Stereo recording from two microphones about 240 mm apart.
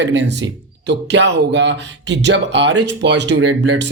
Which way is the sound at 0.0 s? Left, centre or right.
Right.